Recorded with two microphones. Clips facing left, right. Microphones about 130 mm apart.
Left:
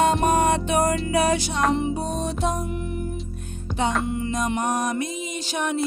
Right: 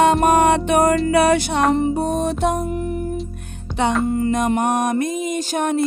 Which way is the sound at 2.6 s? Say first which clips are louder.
Right 6 dB; 40° right (ahead or behind).